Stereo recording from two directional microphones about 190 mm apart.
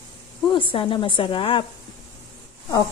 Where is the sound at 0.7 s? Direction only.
25° left (ahead or behind).